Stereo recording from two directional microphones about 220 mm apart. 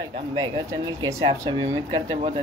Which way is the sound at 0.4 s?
15° right (ahead or behind).